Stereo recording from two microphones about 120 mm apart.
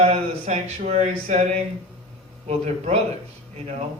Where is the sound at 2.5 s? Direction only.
65° right (ahead or behind).